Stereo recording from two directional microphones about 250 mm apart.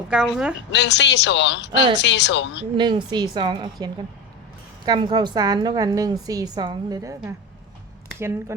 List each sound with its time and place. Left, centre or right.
0.1 s speech: centre
0.7 s a man's voice: left
2.7 s a woman's voice: centre
4.9 s a woman's voice: centre